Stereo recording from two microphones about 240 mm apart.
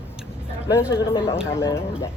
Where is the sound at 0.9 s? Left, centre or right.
Centre.